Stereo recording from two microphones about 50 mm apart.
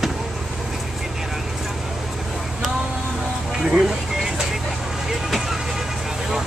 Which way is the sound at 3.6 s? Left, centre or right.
Centre.